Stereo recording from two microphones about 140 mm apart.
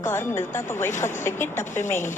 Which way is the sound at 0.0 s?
20° left (ahead or behind).